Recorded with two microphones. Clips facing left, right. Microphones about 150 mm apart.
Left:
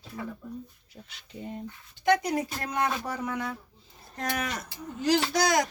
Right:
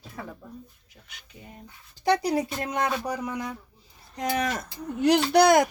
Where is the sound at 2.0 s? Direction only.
35° right (ahead or behind).